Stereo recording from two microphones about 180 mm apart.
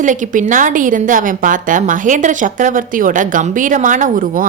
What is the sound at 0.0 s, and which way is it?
A woman's voice, 45° right (ahead or behind).